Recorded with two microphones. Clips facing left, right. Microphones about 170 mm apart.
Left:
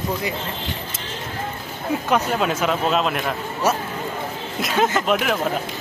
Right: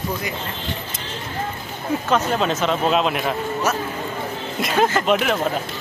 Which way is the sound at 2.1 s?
10° left (ahead or behind).